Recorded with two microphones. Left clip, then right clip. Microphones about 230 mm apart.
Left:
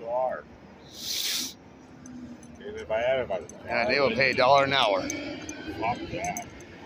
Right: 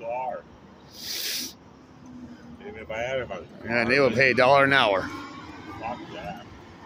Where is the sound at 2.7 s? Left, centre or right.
Right.